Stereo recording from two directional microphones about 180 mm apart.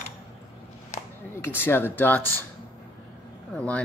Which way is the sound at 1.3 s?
10° left (ahead or behind).